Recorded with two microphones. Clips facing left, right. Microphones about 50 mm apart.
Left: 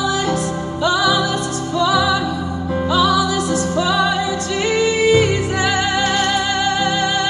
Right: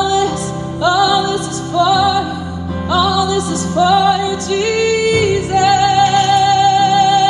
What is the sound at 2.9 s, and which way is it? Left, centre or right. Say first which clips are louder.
Music: right 2 dB; left.